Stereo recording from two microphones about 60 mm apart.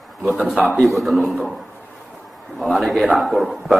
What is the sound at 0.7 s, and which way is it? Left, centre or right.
Speech, centre.